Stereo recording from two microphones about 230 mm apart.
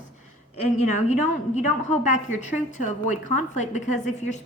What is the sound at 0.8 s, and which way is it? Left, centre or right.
A woman's voice, left.